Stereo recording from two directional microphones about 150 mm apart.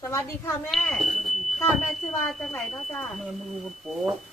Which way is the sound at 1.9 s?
Centre (ahead or behind).